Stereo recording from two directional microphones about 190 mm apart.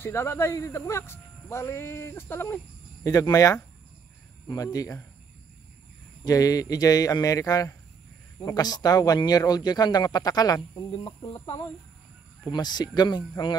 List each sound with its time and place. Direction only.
0.0 s speech: 15° left (ahead or behind)
6.2 s speech: 20° left (ahead or behind)